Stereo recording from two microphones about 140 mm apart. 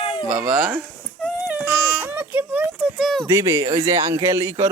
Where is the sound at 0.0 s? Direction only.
35° left (ahead or behind).